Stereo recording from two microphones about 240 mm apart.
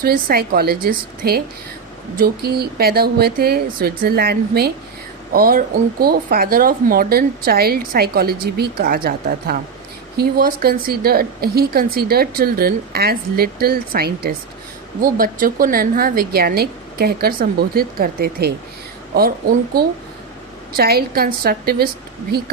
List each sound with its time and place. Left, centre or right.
0.0 s speech: right